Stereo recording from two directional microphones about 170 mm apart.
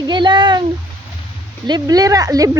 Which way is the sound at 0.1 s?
25° right (ahead or behind).